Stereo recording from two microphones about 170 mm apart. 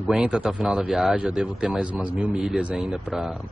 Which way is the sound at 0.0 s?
5° right (ahead or behind).